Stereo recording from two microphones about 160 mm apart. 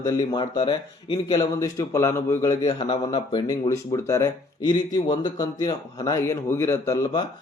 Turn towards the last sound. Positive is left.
turn(degrees=20)  # may be behind; listen again after turning